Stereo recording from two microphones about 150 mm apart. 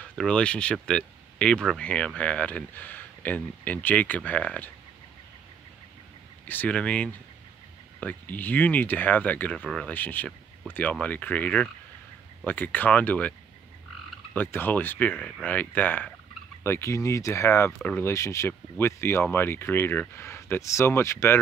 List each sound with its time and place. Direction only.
0.2 s speech: 5° left (ahead or behind)
6.4 s speech: 10° left (ahead or behind)
14.3 s speech: 15° left (ahead or behind)